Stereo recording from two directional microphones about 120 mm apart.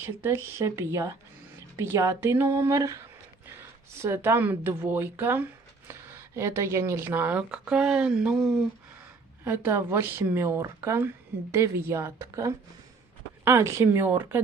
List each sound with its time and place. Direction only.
0.0 s speech: 20° right (ahead or behind); by 8.6 s 5° right (ahead or behind)
9.4 s speech: 20° right (ahead or behind)